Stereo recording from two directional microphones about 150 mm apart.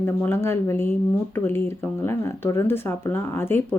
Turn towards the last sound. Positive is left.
turn(degrees=15)  # may be behind; listen again after turning